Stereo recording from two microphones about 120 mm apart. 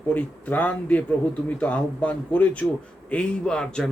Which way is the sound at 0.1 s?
15° left (ahead or behind).